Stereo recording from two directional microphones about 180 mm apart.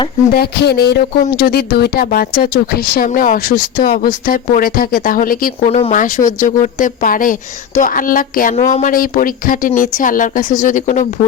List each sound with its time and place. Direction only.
0.3 s speech: 65° left (ahead or behind)
5.5 s speech: 35° left (ahead or behind)